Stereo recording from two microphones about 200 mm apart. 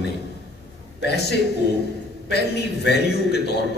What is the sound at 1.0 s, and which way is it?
A man's voice, 55° left (ahead or behind).